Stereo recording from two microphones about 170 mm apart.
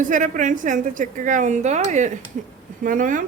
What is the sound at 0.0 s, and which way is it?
Speech, 50° right (ahead or behind).